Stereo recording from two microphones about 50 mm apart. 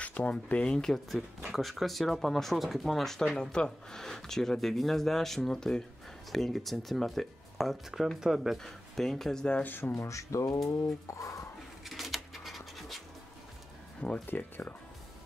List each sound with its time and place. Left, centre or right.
0.0 s speech: left; by 1.0 s centre
1.1 s speech: centre
8.6 s speech: centre
9.6 s speech: left
9.9 s speech: left
11.8 s scratch: centre
14.2 s speech: left